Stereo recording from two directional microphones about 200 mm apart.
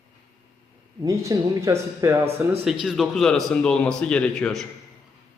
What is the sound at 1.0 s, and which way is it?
A man's voice, 15° right (ahead or behind).